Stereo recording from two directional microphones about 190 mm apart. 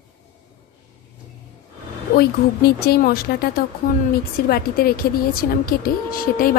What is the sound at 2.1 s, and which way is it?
A woman's voice, 55° left (ahead or behind).